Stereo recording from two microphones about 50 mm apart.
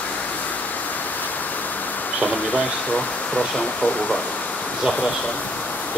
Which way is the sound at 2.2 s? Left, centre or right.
Left.